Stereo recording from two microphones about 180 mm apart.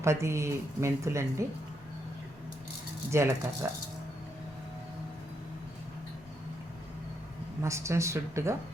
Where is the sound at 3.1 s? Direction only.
15° right (ahead or behind).